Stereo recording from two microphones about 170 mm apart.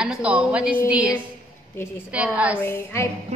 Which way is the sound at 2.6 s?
15° left (ahead or behind).